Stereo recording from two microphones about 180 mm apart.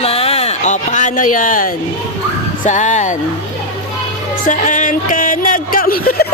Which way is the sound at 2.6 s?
40° left (ahead or behind).